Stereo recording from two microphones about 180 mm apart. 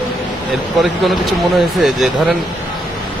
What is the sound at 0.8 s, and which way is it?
Speech, centre (ahead or behind).